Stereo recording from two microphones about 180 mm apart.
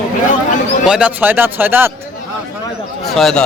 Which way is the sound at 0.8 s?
5° right (ahead or behind).